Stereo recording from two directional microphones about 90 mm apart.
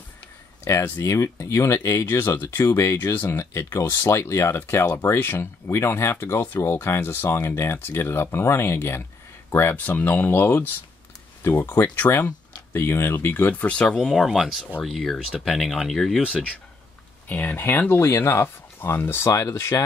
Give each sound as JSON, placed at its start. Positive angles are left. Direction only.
{"t": 0.7, "sound": "speech", "side_deg": 35}
{"t": 14.0, "sound": "speech", "side_deg": 0}
{"t": 17.3, "sound": "speech", "side_deg": 20}